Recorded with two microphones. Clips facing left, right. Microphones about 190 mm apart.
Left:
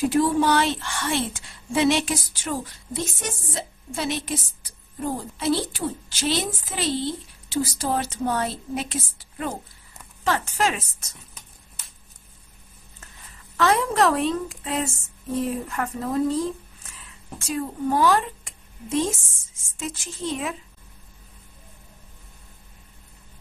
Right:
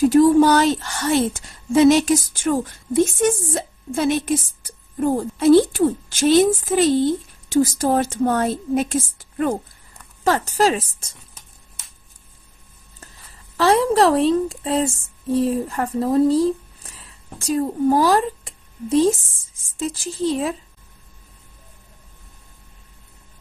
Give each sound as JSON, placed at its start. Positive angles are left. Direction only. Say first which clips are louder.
{"t": 0.0, "sound": "a woman's voice", "louder": "right 8 dB", "side_deg": -40}
{"t": 10.2, "sound": "a woman's voice", "louder": "right 6 dB", "side_deg": -40}
{"t": 13.6, "sound": "a woman's voice", "louder": "right 5 dB", "side_deg": -30}